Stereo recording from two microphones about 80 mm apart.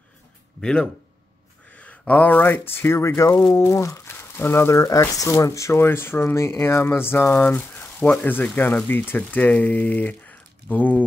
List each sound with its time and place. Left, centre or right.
0.6 s speech: centre